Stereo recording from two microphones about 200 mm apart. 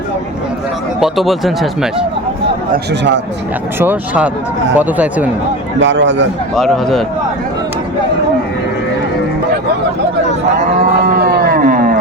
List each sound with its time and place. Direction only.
0.9 s speech: centre (ahead or behind)
2.7 s speech: 60° right (ahead or behind)
3.8 s speech: 10° right (ahead or behind)
5.8 s speech: 65° right (ahead or behind)
6.6 s speech: centre (ahead or behind)
11.0 s a sound: 50° right (ahead or behind)